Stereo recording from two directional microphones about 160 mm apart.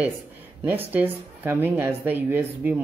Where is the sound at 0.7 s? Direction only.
10° right (ahead or behind).